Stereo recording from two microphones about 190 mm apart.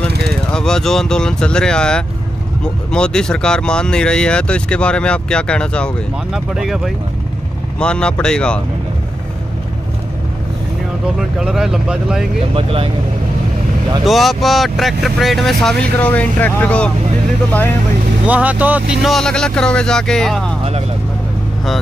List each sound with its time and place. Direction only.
0.3 s speech: 5° left (ahead or behind)
11.1 s speech: centre (ahead or behind)
12.5 s speech: 30° right (ahead or behind)
14.0 s speech: centre (ahead or behind)
18.2 s speech: 10° right (ahead or behind)